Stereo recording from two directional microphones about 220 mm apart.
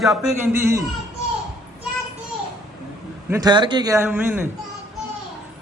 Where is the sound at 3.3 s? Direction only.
20° right (ahead or behind).